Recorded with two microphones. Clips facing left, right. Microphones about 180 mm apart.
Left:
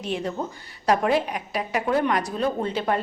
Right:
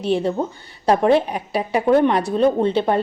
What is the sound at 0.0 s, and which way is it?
A woman's voice, 30° right (ahead or behind).